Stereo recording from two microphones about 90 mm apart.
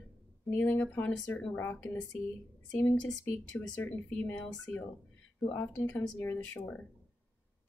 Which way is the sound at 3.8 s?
15° left (ahead or behind).